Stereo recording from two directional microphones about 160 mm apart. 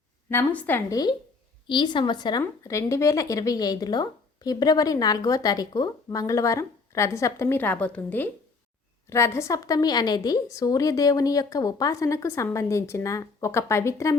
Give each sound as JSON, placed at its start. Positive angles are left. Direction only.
{"t": 0.3, "sound": "a woman's voice", "side_deg": 15}
{"t": 1.6, "sound": "speech", "side_deg": 30}